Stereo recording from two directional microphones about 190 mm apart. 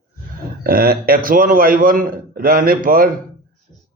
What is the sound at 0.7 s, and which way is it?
A man's voice, 50° right (ahead or behind).